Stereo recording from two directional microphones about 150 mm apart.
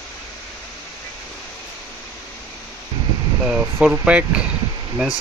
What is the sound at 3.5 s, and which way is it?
Speech, 5° right (ahead or behind).